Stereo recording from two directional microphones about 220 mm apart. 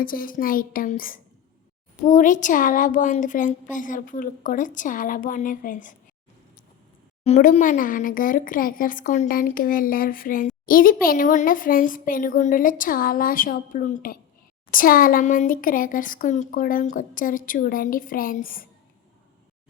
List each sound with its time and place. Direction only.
0.0 s speech: 40° left (ahead or behind)
7.3 s speech: 30° left (ahead or behind)